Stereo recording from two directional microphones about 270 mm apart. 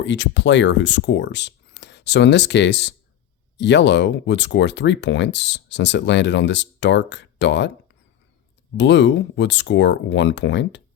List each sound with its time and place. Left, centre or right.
0.0 s speech: left
8.8 s speech: left